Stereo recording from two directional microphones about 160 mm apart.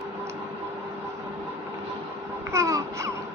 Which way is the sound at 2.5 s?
20° right (ahead or behind).